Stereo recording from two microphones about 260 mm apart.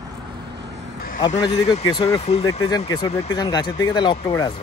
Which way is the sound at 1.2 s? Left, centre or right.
Centre.